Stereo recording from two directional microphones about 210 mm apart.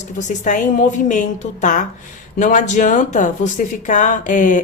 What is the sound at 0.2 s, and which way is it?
Speech, 35° left (ahead or behind).